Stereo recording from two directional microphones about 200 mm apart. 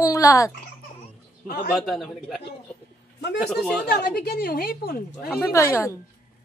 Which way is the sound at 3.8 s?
50° left (ahead or behind).